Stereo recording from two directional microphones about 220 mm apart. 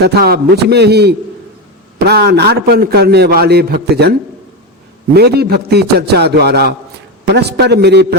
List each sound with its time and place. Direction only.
0.0 s a man's voice: 45° right (ahead or behind)
5.1 s a man's voice: 45° right (ahead or behind)